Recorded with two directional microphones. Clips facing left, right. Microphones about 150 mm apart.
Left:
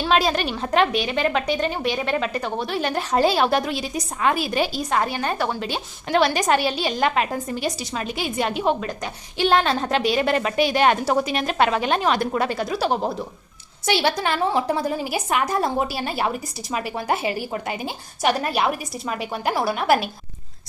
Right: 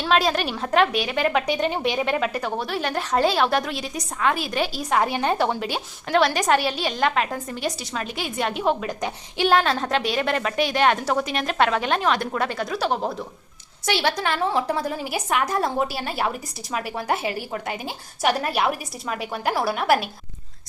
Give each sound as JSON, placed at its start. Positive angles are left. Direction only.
{"t": 0.0, "sound": "a woman's voice", "side_deg": 0}
{"t": 6.1, "sound": "a woman's voice", "side_deg": 0}
{"t": 8.9, "sound": "a woman's voice", "side_deg": -15}
{"t": 9.5, "sound": "a woman's voice", "side_deg": 0}